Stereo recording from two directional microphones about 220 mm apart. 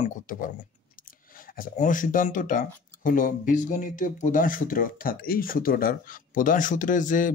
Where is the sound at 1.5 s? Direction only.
40° left (ahead or behind).